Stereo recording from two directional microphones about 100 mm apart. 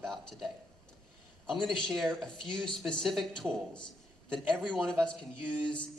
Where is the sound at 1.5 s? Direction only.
5° left (ahead or behind).